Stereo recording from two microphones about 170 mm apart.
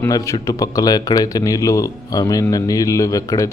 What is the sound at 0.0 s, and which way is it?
Speech, 15° left (ahead or behind).